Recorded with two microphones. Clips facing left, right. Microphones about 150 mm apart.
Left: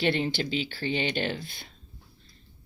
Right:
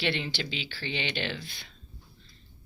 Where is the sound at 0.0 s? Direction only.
45° left (ahead or behind).